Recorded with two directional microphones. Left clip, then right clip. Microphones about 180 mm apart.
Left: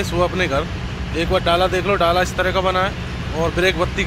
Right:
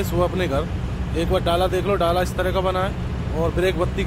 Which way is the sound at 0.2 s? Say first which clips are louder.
Left 3 dB; 10° left (ahead or behind).